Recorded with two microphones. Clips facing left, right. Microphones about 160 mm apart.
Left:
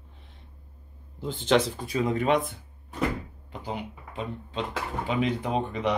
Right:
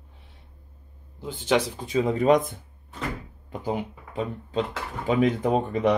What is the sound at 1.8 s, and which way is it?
Speech, 25° right (ahead or behind).